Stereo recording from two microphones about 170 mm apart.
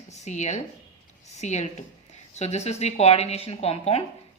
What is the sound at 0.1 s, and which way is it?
Speech, 40° left (ahead or behind).